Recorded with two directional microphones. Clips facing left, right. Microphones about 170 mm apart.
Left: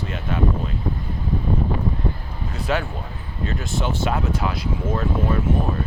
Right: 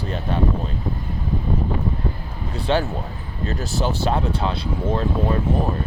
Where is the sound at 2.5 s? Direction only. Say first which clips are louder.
Right 3 dB; 30° right (ahead or behind).